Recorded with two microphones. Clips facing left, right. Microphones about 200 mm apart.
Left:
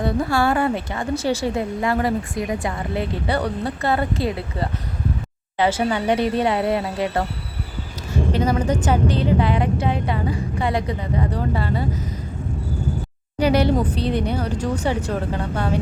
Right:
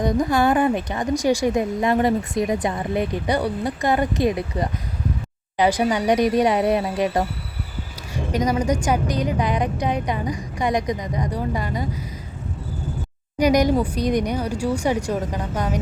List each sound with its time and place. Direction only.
0.0 s a woman's voice: 15° right (ahead or behind)
13.4 s a woman's voice: 15° right (ahead or behind)